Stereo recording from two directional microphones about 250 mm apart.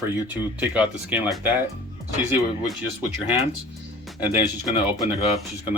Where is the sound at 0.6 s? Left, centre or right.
Centre.